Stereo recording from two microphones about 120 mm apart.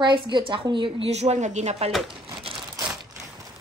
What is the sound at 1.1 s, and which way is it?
Speech, 65° right (ahead or behind).